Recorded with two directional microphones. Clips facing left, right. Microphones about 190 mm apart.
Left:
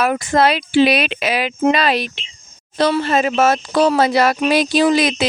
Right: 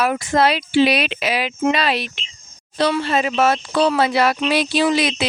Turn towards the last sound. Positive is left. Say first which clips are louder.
# left 3 dB
turn(degrees=45)  # may be behind; listen again after turning